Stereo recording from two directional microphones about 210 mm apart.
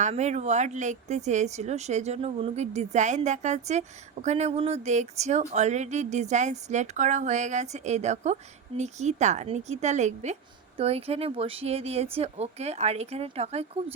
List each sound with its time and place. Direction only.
0.0 s speech: 35° right (ahead or behind)